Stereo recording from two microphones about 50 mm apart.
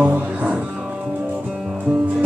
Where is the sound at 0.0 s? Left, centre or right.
Right.